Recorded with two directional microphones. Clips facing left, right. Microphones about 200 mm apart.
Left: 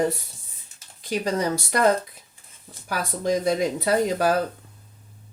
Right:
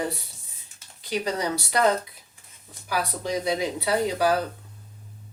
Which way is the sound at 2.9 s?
45° left (ahead or behind).